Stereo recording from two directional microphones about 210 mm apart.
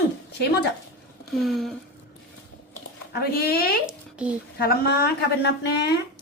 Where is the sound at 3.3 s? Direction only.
45° left (ahead or behind).